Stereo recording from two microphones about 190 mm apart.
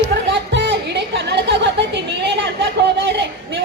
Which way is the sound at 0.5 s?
65° right (ahead or behind).